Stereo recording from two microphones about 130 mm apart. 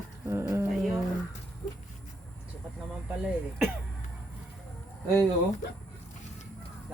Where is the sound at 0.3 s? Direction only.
20° right (ahead or behind).